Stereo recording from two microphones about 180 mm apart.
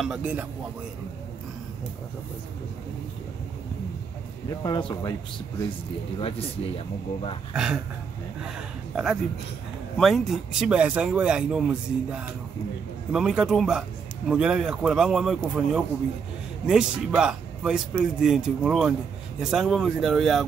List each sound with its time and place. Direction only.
0.0 s speech: 5° right (ahead or behind)
4.6 s speech: 25° left (ahead or behind)
7.5 s speech: 5° right (ahead or behind)
8.9 s speech: 5° right (ahead or behind)